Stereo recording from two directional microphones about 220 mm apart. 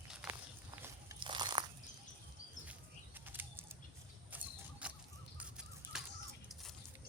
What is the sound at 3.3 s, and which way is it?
Bird flight, 10° right (ahead or behind).